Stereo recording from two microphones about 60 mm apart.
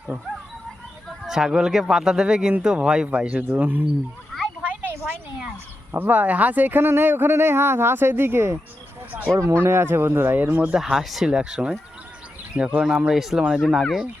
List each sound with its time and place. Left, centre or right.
1.3 s speech: centre
3.5 s speech: right
4.6 s a sound: right
5.9 s speech: right
9.3 s speech: right
10.3 s speech: right
10.8 s speech: centre